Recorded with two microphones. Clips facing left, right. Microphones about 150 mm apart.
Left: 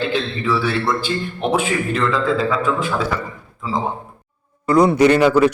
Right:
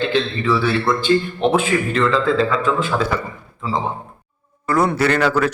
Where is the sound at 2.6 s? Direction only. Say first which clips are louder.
Even; 10° left (ahead or behind).